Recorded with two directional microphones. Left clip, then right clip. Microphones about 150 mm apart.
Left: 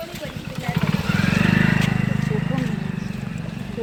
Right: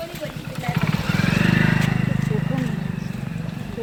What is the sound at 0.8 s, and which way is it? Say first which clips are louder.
Wild animals: left 1 dB; 25° left (ahead or behind).